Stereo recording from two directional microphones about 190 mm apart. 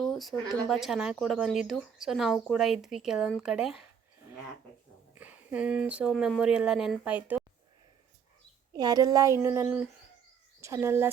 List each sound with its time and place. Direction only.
0.0 s a sound: centre (ahead or behind)
0.7 s speech: centre (ahead or behind)
5.1 s speech: 10° right (ahead or behind)
8.7 s speech: 20° right (ahead or behind)